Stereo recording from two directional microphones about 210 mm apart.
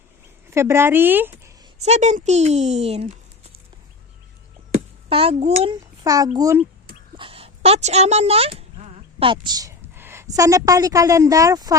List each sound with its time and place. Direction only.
0.5 s a woman's voice: 10° right (ahead or behind)
1.8 s speech: 30° right (ahead or behind)
5.0 s a child's voice: 25° right (ahead or behind)